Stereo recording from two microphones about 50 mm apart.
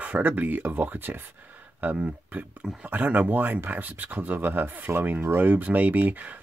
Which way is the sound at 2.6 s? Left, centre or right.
Centre.